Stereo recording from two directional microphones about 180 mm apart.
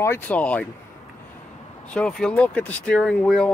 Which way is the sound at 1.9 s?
5° left (ahead or behind).